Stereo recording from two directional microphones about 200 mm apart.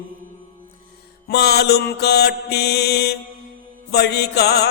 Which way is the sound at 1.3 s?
55° left (ahead or behind).